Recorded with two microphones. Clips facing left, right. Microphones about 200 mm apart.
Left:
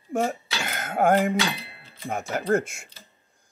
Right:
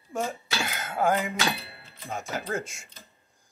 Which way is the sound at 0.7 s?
50° left (ahead or behind).